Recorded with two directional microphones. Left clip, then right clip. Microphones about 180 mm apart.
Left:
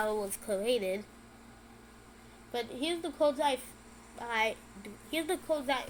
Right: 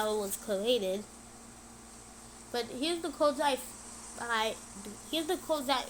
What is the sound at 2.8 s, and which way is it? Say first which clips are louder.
A woman's voice: even; 20° right (ahead or behind).